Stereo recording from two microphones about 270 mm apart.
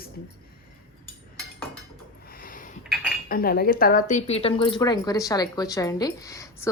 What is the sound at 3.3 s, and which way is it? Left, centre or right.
Speech, left.